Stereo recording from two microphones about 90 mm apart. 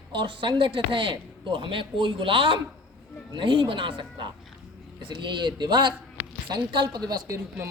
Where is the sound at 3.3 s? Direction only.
60° right (ahead or behind); by 7.4 s 45° right (ahead or behind).